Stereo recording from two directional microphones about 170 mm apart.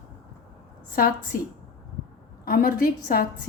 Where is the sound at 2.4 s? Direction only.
55° left (ahead or behind).